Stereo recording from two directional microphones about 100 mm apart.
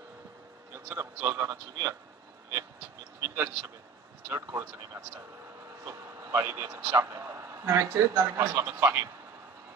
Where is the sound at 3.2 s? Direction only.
25° right (ahead or behind).